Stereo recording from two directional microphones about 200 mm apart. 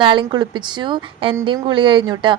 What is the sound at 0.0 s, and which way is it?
A woman's voice, 25° right (ahead or behind).